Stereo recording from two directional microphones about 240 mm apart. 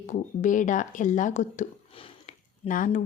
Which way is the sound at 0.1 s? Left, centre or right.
Left.